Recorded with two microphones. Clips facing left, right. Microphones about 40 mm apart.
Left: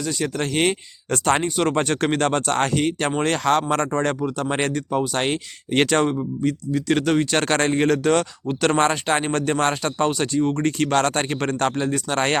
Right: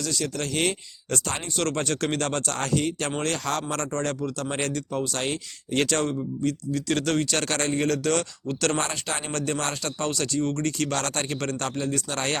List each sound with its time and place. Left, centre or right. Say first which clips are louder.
0.0 s speech: left 4 dB; left
1.5 s speech: left 6 dB; left
1.7 s speech: left 5 dB; left
6.4 s speech: left 4 dB; left
7.3 s speech: left 6 dB; left
7.9 s speech: left 6 dB; left
8.8 s speech: left 10 dB; left
10.7 s speech: left 7 dB; left